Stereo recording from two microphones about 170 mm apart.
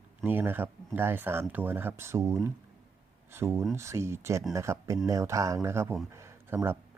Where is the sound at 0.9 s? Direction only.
10° right (ahead or behind).